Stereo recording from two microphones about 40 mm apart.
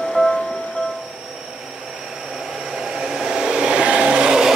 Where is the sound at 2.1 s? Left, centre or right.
Centre.